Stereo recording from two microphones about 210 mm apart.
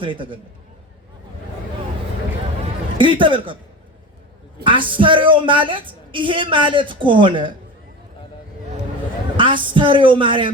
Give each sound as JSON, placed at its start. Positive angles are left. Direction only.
{"t": 0.0, "sound": "a woman's voice", "side_deg": -25}
{"t": 3.0, "sound": "a woman's voice", "side_deg": -25}
{"t": 4.6, "sound": "a woman's voice", "side_deg": -25}
{"t": 9.4, "sound": "a woman's voice", "side_deg": -25}